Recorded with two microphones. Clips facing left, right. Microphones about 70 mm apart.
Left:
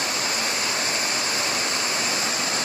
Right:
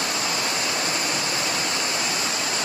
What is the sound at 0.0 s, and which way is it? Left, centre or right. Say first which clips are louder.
Waterfall: right 1 dB; left.